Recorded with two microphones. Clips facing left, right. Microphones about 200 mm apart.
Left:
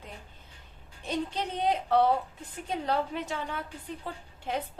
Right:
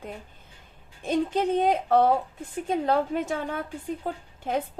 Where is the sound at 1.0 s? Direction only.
50° right (ahead or behind).